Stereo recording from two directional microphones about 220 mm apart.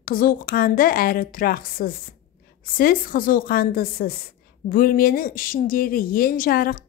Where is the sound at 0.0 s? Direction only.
40° left (ahead or behind).